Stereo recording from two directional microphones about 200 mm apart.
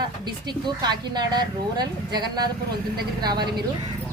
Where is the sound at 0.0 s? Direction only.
20° right (ahead or behind).